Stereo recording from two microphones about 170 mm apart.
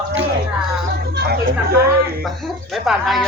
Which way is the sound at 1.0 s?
75° right (ahead or behind).